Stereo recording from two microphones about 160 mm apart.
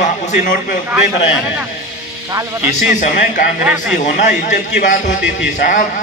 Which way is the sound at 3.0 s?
50° left (ahead or behind).